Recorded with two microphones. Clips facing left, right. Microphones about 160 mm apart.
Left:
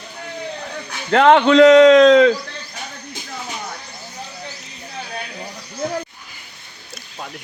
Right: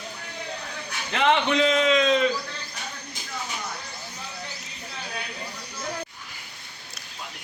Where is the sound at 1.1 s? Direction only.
65° left (ahead or behind).